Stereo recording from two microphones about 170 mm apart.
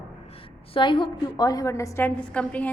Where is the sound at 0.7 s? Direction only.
30° left (ahead or behind).